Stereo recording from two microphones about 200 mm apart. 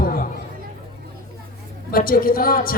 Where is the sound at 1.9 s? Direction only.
45° left (ahead or behind).